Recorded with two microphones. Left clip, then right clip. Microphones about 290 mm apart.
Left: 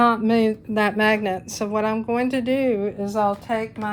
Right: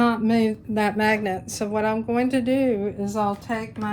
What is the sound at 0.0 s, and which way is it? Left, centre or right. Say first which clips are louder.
Speech: left 3 dB; left.